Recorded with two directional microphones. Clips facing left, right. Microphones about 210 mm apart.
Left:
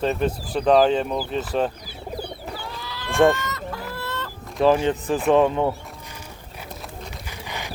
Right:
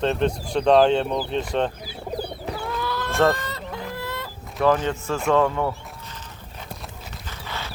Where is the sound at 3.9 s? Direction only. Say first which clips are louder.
Even; 15° right (ahead or behind).